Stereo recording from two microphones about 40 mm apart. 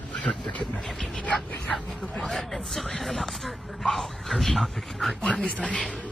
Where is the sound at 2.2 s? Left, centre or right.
Centre.